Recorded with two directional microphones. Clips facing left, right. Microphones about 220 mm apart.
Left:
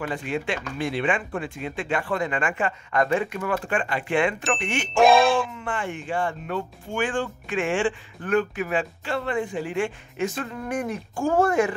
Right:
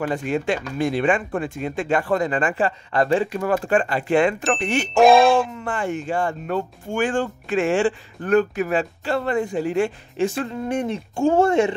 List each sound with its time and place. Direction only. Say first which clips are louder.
0.0 s speech: right 5 dB; 40° right (ahead or behind)
4.9 s speech: right 4 dB; centre (ahead or behind)
5.6 s speech: right 5 dB; 40° right (ahead or behind)